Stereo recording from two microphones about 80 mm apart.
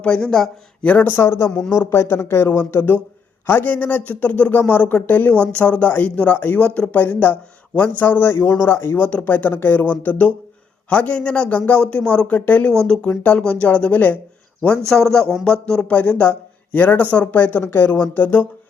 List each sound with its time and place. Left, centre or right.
0.0 s speech: centre
0.9 s a man's voice: left
1.5 s speech: centre
1.8 s a man's voice: left
9.0 s a man's voice: centre
14.8 s a man's voice: centre; by 18.4 s left